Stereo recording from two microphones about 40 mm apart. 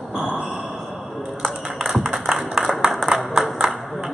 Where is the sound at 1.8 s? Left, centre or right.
Centre.